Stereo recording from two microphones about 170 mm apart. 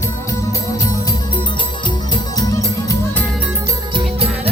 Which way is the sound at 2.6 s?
20° left (ahead or behind).